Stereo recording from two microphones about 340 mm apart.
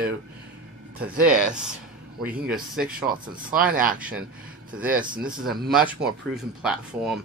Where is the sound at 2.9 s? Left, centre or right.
Right.